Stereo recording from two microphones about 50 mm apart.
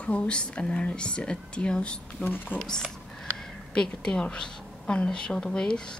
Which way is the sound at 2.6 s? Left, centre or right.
Centre.